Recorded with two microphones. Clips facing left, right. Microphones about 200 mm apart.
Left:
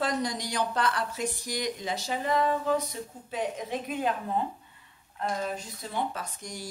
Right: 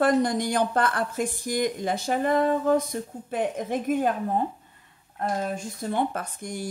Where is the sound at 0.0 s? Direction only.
55° right (ahead or behind).